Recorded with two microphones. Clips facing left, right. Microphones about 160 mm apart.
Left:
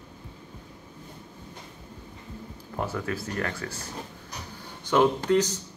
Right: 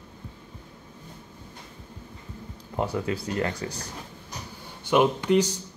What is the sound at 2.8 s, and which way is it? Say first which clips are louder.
Speech: right 3 dB; 20° right (ahead or behind).